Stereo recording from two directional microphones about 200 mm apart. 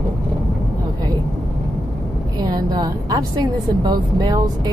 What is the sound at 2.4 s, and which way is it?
A woman's voice, 20° right (ahead or behind).